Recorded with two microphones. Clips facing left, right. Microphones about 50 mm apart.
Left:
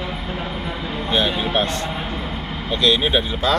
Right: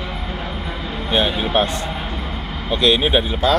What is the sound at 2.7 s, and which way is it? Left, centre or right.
Speech, centre.